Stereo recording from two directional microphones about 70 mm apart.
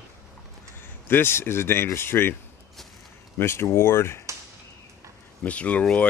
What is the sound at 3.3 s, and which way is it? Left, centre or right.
Speech, left.